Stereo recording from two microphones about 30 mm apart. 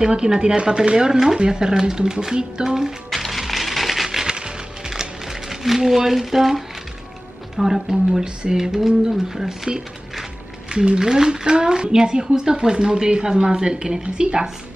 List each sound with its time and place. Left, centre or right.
0.0 s speech: right
3.1 s music: centre
4.3 s music: right
4.9 s music: centre
5.9 s speech: centre
8.2 s speech: right